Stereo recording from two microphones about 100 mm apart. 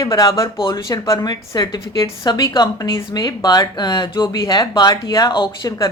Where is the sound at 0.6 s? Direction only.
55° left (ahead or behind).